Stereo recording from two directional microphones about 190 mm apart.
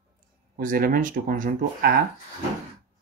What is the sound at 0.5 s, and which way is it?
Speech, 45° right (ahead or behind).